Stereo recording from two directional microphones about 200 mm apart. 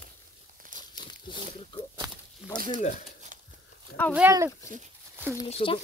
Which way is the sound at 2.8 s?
35° left (ahead or behind).